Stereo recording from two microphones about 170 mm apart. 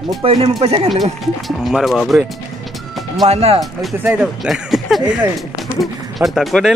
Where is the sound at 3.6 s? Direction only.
Centre (ahead or behind).